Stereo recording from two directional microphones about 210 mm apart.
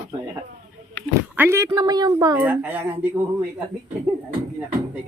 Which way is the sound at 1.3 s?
10° right (ahead or behind).